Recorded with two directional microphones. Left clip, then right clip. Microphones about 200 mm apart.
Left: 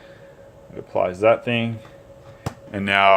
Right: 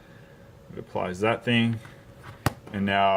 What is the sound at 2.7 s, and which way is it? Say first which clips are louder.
Speech: left 7 dB; 40° left (ahead or behind).